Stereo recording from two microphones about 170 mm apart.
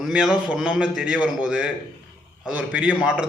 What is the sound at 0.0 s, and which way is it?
A man's voice, 5° right (ahead or behind).